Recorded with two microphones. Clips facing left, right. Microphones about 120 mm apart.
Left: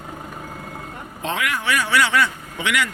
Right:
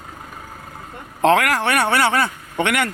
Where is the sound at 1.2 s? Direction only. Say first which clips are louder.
Right 9 dB; 75° right (ahead or behind); by 2.9 s 55° right (ahead or behind).